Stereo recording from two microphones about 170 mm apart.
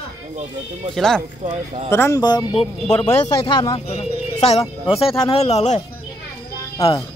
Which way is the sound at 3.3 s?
25° left (ahead or behind).